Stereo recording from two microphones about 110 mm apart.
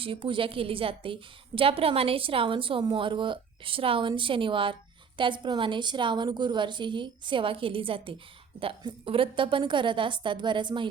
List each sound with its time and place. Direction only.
0.0 s a woman's voice: 55° right (ahead or behind)